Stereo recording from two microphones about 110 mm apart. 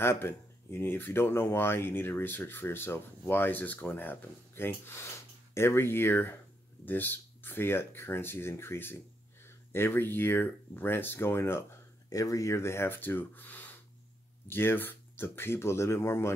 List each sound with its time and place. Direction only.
0.0 s speech: 20° left (ahead or behind)